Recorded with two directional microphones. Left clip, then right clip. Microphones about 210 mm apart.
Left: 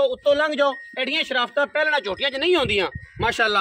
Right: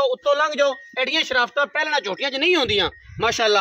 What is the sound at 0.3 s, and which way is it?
Speech, centre (ahead or behind).